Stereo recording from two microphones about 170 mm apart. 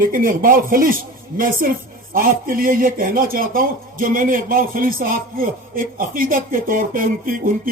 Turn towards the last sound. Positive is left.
turn(degrees=-55)  # may be behind; listen again after turning